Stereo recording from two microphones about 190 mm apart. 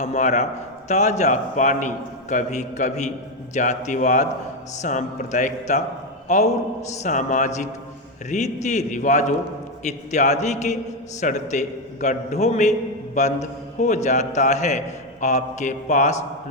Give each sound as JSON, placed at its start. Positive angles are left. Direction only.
{"t": 0.0, "sound": "a man's voice", "side_deg": 40}